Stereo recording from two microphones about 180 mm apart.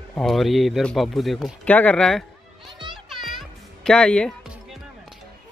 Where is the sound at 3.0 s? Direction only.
Centre (ahead or behind).